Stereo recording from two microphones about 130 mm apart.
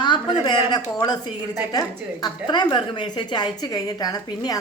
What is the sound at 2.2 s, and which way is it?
A woman's voice, 35° left (ahead or behind).